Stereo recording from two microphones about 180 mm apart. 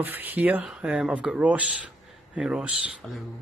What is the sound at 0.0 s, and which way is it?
Speech, 10° right (ahead or behind).